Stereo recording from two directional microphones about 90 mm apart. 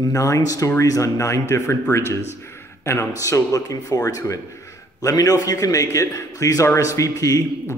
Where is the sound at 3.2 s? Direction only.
40° left (ahead or behind).